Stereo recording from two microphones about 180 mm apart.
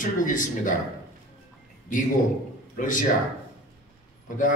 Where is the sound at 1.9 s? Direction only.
45° left (ahead or behind).